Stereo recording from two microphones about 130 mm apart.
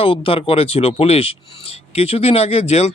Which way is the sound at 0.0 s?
45° left (ahead or behind).